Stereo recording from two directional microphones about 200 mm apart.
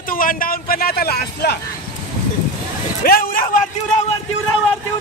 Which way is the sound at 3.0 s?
45° left (ahead or behind).